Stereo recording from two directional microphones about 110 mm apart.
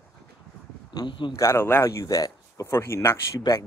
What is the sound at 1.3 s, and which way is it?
Speech, 25° left (ahead or behind).